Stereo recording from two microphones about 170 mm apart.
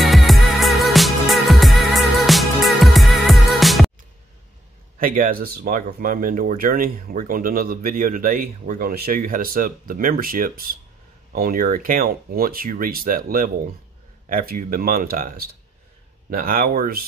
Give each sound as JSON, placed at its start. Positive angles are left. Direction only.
{"t": 0.0, "sound": "music", "side_deg": 0}
{"t": 4.9, "sound": "speech", "side_deg": -55}